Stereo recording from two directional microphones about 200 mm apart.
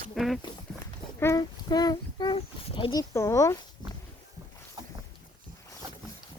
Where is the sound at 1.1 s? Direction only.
15° left (ahead or behind).